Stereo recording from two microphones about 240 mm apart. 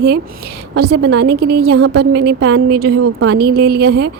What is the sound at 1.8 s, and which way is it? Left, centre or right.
Speech, right.